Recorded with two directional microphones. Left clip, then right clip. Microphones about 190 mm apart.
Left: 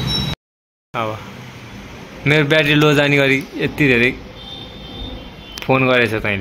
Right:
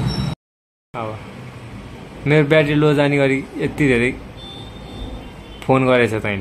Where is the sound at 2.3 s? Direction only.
Centre (ahead or behind).